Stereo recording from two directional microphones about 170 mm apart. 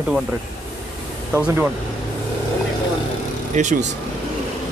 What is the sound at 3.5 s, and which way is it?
Speech, 45° right (ahead or behind).